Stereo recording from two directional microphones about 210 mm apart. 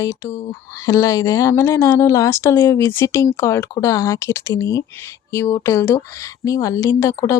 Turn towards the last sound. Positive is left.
turn(degrees=15)  # may be behind; listen again after turning